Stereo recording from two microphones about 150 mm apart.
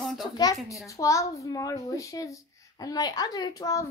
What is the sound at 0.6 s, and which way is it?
A woman's voice, 20° left (ahead or behind).